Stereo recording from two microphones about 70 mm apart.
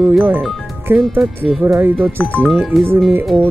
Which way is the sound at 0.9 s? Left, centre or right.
Right.